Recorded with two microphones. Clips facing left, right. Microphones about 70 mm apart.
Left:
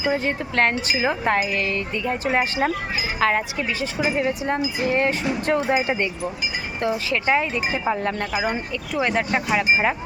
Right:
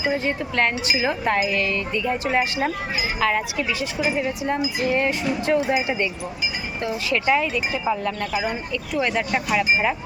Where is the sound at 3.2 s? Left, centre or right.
Left.